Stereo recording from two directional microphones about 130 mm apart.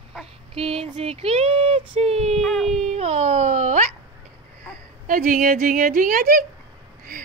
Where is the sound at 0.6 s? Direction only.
50° right (ahead or behind).